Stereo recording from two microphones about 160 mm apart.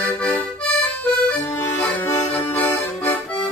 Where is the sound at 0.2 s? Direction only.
10° left (ahead or behind).